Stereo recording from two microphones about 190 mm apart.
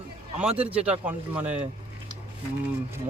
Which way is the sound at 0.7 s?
5° right (ahead or behind).